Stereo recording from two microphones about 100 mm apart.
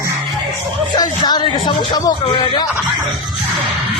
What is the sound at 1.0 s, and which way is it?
Music, 45° left (ahead or behind).